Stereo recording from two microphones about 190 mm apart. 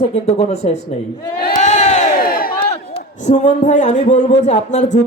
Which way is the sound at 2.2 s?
50° left (ahead or behind).